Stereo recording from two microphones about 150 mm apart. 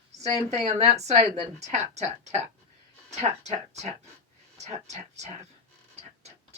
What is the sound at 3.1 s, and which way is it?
Music, 50° right (ahead or behind).